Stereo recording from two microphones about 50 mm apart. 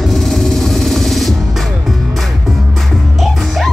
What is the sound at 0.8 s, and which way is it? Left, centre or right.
Music, centre.